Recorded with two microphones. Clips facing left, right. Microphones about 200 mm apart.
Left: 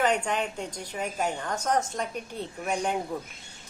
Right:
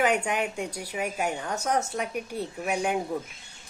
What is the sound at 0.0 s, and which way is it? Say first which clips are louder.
Speech: right 1 dB; 10° right (ahead or behind).